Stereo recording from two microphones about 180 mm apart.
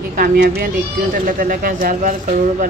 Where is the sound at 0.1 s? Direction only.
50° right (ahead or behind).